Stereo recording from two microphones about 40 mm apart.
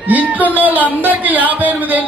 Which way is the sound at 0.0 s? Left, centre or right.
Right.